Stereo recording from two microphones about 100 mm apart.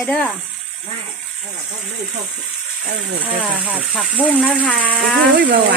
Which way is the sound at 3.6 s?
10° right (ahead or behind).